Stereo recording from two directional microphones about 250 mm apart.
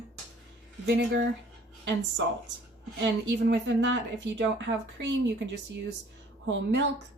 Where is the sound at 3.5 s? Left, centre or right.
Right.